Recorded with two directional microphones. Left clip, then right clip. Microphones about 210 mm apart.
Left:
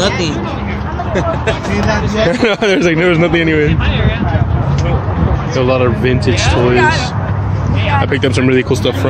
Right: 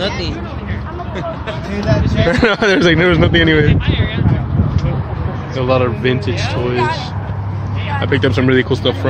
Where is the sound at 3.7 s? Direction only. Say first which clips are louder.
Left 2 dB; 40° left (ahead or behind).